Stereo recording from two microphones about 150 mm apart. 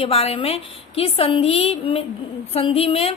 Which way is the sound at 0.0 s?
40° left (ahead or behind).